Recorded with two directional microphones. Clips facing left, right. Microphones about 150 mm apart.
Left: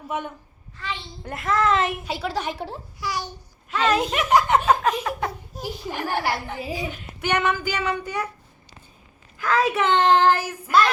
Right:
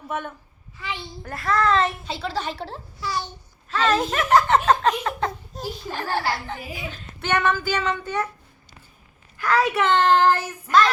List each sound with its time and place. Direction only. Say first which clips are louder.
1.2 s a woman's voice: even; 20° left (ahead or behind)
6.6 s a child's voice: left 6 dB; 30° left (ahead or behind)
6.8 s a woman's voice: left 2 dB; 15° left (ahead or behind)
9.5 s a woman's voice: even; 15° left (ahead or behind)